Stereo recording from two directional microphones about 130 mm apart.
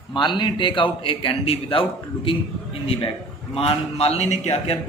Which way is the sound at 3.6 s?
50° left (ahead or behind).